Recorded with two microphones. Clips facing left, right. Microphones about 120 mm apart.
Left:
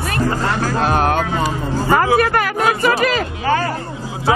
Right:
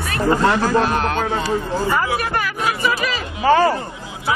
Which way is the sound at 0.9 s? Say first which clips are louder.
Left 3 dB; 50° left (ahead or behind).